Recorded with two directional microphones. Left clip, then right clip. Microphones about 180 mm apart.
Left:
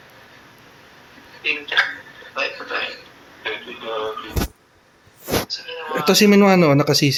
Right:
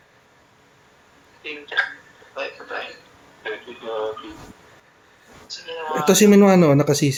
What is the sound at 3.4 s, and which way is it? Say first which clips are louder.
Radio: left 3 dB; 45° right (ahead or behind).